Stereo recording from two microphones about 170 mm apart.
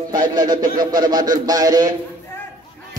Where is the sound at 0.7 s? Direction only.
25° right (ahead or behind).